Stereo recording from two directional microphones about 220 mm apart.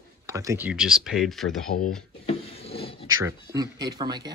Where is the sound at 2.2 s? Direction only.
25° left (ahead or behind).